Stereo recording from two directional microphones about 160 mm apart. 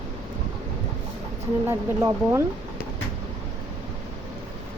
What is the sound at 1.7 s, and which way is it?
Speech, 15° right (ahead or behind).